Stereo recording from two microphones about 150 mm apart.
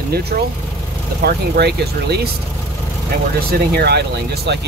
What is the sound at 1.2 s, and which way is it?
Speech, 90° right.